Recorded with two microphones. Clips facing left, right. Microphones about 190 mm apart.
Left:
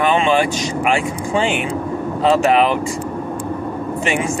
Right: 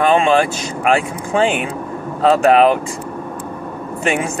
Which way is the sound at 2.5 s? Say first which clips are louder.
Right 7 dB; 45° right (ahead or behind).